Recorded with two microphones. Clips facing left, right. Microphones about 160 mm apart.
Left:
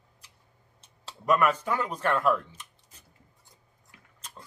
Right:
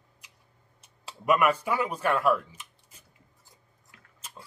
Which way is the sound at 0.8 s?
10° right (ahead or behind).